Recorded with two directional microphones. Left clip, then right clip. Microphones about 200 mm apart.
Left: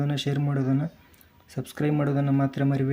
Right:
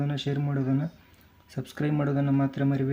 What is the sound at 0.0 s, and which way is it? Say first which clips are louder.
Speech: left 2 dB; 20° left (ahead or behind).